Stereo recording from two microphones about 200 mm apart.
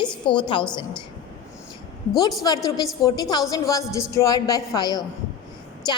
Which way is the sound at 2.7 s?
20° left (ahead or behind).